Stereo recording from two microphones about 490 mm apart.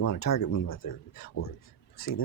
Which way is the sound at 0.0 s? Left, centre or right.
Left.